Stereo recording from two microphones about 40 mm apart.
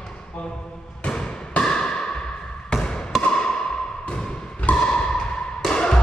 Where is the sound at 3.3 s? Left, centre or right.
Centre.